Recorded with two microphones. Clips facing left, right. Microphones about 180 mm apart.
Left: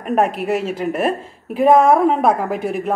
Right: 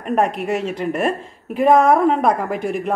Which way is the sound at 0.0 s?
5° left (ahead or behind).